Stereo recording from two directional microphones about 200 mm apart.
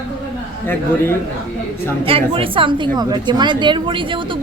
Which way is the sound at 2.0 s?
25° right (ahead or behind).